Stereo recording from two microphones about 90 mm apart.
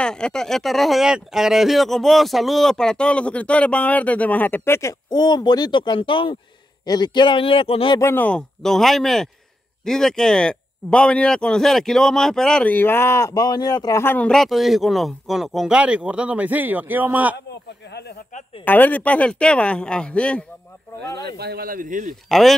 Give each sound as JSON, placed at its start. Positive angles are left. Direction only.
{"t": 0.0, "sound": "speech", "side_deg": 10}
{"t": 5.1, "sound": "speech", "side_deg": 50}
{"t": 6.9, "sound": "speech", "side_deg": 55}
{"t": 8.0, "sound": "speech", "side_deg": 25}
{"t": 8.3, "sound": "speech", "side_deg": 5}
{"t": 12.6, "sound": "speech", "side_deg": 20}
{"t": 13.3, "sound": "speech", "side_deg": 45}
{"t": 14.1, "sound": "a man's voice", "side_deg": 10}
{"t": 18.6, "sound": "speech", "side_deg": 20}
{"t": 22.3, "sound": "speech", "side_deg": 0}